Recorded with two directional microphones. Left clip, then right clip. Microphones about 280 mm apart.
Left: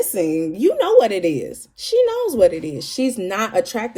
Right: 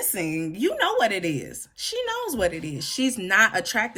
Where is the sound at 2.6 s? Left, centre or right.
Centre.